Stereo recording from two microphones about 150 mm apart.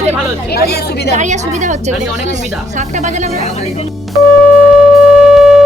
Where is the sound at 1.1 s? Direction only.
50° right (ahead or behind).